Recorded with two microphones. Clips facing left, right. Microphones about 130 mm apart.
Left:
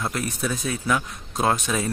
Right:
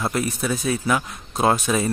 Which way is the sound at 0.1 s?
5° right (ahead or behind).